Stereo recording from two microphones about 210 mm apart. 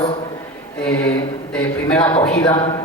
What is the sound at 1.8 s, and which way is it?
Speech, 5° left (ahead or behind).